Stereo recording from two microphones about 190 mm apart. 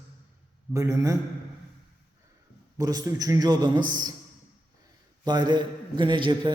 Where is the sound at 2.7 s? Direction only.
20° right (ahead or behind).